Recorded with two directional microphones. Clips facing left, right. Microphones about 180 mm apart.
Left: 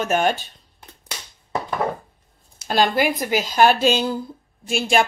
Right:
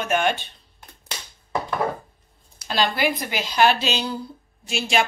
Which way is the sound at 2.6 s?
45° left (ahead or behind).